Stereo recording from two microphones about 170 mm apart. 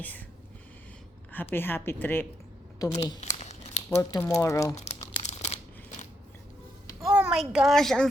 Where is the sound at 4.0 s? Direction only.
20° left (ahead or behind).